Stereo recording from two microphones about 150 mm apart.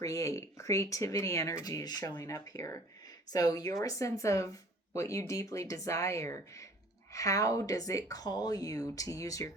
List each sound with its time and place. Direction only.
0.0 s speech: 20° left (ahead or behind)